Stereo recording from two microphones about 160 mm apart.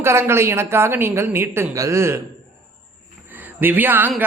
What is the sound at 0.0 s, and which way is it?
A man's voice, 15° right (ahead or behind).